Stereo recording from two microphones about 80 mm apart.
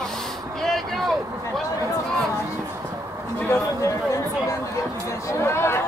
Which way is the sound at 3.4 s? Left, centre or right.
Left.